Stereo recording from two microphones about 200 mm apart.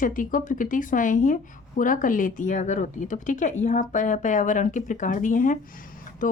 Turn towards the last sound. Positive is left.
turn(degrees=40)  # may be behind; listen again after turning